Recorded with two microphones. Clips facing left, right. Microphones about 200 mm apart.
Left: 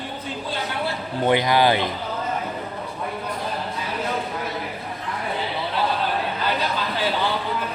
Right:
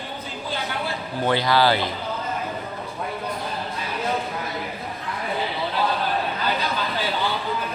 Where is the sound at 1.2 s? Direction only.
15° left (ahead or behind).